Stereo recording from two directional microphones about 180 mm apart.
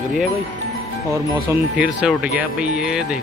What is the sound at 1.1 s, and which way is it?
Speech, 10° right (ahead or behind).